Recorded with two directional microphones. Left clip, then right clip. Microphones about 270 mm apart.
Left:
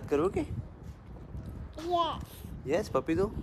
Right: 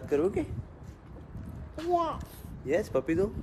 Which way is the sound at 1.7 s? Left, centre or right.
Centre.